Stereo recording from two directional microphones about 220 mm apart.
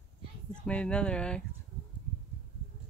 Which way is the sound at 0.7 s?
5° left (ahead or behind).